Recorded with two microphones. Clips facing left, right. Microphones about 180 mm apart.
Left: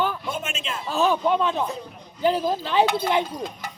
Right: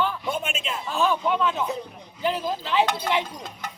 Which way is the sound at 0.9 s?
40° left (ahead or behind).